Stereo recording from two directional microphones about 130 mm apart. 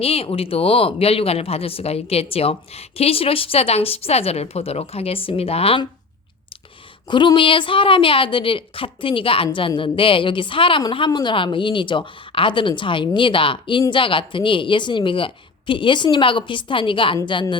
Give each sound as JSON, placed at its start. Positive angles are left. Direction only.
{"t": 0.0, "sound": "a woman's voice", "side_deg": 50}
{"t": 7.1, "sound": "a woman's voice", "side_deg": 35}